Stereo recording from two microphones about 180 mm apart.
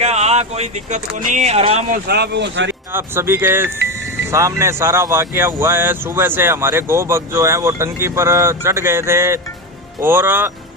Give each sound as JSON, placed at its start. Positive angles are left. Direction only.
{"t": 0.0, "sound": "speech", "side_deg": -35}
{"t": 1.9, "sound": "speech", "side_deg": -60}
{"t": 2.9, "sound": "speech", "side_deg": -15}